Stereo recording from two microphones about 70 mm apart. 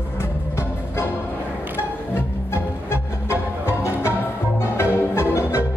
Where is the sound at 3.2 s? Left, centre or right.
Left.